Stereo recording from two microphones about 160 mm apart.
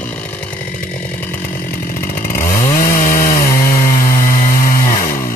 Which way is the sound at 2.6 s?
60° left (ahead or behind).